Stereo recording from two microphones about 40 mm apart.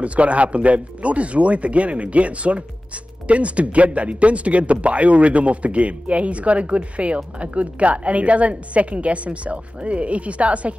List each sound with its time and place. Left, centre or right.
0.0 s speech: right